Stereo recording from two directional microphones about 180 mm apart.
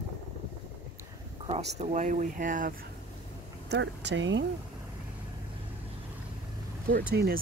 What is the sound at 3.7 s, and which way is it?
Speech, 80° right.